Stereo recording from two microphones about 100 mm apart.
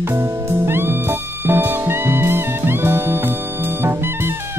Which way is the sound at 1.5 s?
20° right (ahead or behind).